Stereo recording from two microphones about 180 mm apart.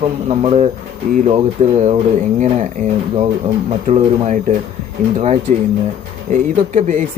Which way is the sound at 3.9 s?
40° right (ahead or behind).